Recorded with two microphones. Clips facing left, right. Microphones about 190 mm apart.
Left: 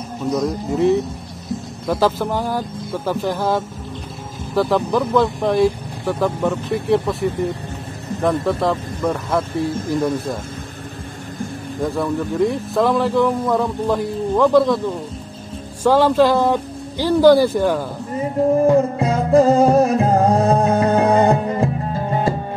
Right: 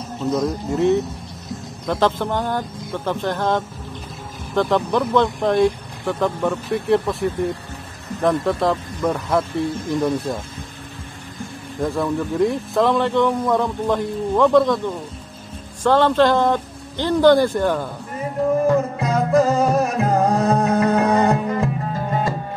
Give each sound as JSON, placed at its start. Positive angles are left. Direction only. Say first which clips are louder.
{"t": 0.4, "sound": "a man's voice", "louder": "left 2 dB", "side_deg": 0}
{"t": 11.8, "sound": "a man's voice", "louder": "even", "side_deg": 0}
{"t": 18.9, "sound": "music", "louder": "left 3 dB", "side_deg": 30}